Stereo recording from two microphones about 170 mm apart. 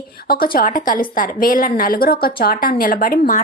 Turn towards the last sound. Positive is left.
turn(degrees=60)  # may be behind; listen again after turning